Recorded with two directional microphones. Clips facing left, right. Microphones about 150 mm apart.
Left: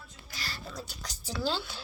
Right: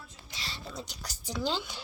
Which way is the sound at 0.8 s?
15° right (ahead or behind).